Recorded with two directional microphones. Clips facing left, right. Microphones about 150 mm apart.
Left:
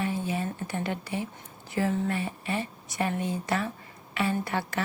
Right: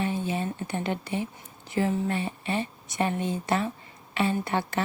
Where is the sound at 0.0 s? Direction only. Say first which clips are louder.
Right 1 dB; 25° right (ahead or behind).